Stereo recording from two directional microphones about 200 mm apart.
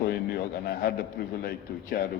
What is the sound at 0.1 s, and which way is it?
A man's voice, 50° left (ahead or behind).